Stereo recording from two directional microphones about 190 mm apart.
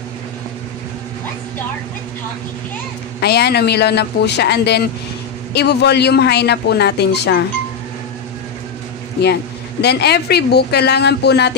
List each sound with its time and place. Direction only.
3.2 s speech: 60° left (ahead or behind)
9.2 s speech: 60° left (ahead or behind)